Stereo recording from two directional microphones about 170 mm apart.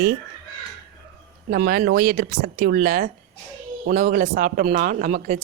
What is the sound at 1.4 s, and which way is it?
A man's voice, 60° right (ahead or behind).